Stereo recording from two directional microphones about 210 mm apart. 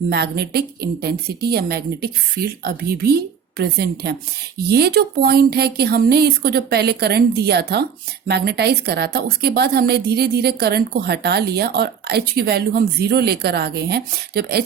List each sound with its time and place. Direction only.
0.1 s a woman's voice: 50° right (ahead or behind)